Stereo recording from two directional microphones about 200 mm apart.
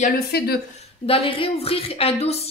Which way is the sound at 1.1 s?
25° left (ahead or behind).